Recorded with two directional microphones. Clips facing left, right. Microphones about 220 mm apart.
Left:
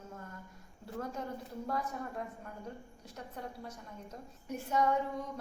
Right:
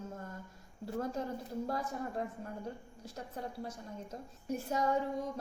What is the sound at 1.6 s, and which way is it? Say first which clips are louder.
A woman's voice: left 1 dB; 30° right (ahead or behind).